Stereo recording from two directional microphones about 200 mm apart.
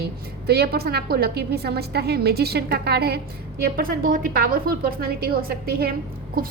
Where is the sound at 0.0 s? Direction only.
50° right (ahead or behind).